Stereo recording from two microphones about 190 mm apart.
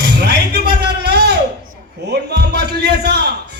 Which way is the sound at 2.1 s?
60° right (ahead or behind).